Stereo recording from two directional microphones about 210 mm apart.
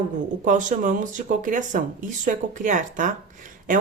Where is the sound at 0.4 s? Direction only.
35° right (ahead or behind).